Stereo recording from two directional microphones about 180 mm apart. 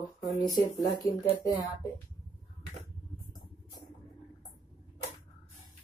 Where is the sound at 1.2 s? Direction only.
15° left (ahead or behind).